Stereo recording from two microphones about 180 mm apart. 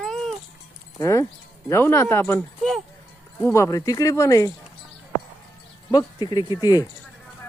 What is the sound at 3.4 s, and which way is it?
Speech, 15° left (ahead or behind).